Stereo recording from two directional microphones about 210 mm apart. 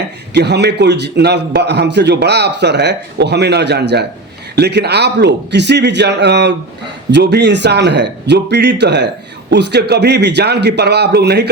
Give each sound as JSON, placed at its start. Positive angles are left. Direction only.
{"t": 0.3, "sound": "a man's voice", "side_deg": -55}